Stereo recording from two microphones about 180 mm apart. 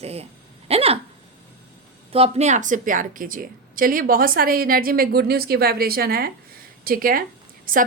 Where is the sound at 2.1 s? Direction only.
35° right (ahead or behind).